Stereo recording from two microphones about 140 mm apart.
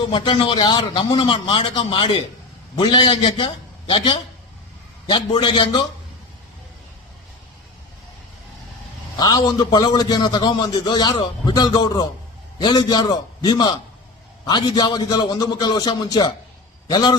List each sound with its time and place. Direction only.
0.1 s a man's voice: 35° left (ahead or behind)
9.1 s a man's voice: 30° left (ahead or behind)